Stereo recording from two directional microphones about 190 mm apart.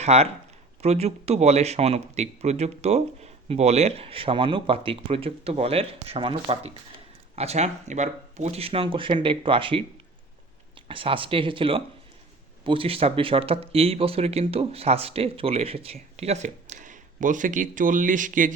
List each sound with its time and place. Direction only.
0.0 s speech: 35° right (ahead or behind)